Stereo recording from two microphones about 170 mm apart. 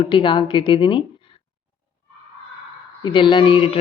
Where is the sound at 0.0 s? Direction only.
30° left (ahead or behind).